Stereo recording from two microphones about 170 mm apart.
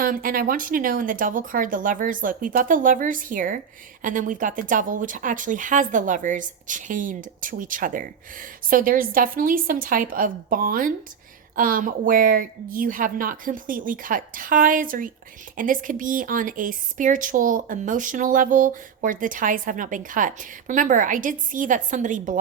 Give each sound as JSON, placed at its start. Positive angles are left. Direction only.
{"t": 0.0, "sound": "speech", "side_deg": -55}